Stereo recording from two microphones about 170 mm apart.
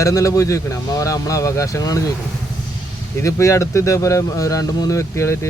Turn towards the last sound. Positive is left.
turn(degrees=15)  # may be behind; listen again after turning